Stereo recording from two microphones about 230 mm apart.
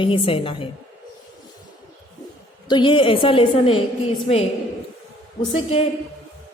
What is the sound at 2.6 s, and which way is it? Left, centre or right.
A man's voice, left.